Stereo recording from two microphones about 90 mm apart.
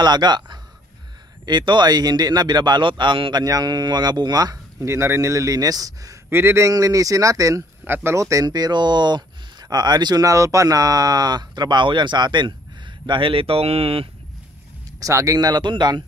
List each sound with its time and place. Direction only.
0.0 s speech: 50° right (ahead or behind)
3.4 s speech: 45° right (ahead or behind)
4.8 s speech: 30° right (ahead or behind)
6.3 s speech: 30° right (ahead or behind)
6.7 s speech: 40° right (ahead or behind)
7.8 s speech: 25° right (ahead or behind); by 14.0 s 90° right
15.0 s speech: 40° right (ahead or behind); by 16.0 s 55° right (ahead or behind)